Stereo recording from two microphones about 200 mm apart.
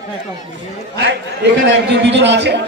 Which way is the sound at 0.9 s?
60° right (ahead or behind).